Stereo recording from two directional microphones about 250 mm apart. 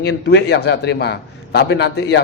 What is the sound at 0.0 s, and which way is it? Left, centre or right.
A man's voice, left.